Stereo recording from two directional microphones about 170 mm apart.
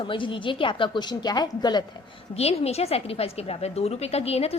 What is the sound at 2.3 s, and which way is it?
A woman's voice, 35° left (ahead or behind).